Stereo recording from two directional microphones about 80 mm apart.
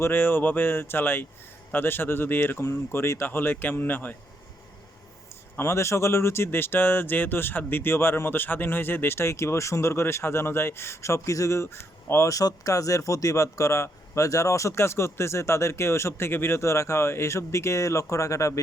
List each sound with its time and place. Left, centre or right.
0.0 s speech: left
5.5 s speech: left